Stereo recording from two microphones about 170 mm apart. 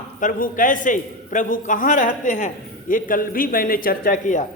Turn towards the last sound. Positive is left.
turn(degrees=50)  # may be behind; listen again after turning